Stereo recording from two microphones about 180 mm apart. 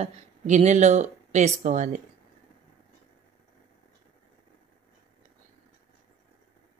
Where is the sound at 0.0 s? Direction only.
40° right (ahead or behind).